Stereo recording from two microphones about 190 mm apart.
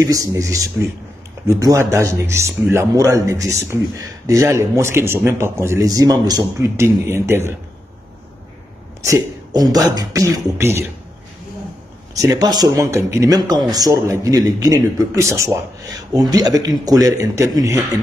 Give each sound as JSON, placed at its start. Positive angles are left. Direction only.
{"t": 0.0, "sound": "a man's voice", "side_deg": -20}
{"t": 9.0, "sound": "a man's voice", "side_deg": -15}
{"t": 12.2, "sound": "a man's voice", "side_deg": -20}